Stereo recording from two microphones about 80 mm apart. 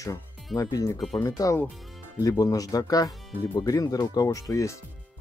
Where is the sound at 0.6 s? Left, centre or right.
Left.